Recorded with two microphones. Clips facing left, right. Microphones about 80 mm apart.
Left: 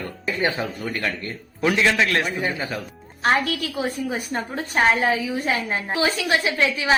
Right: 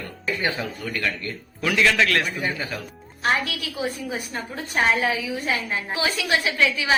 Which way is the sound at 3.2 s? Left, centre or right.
Left.